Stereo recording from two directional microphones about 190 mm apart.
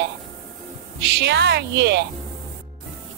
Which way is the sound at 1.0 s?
60° right (ahead or behind).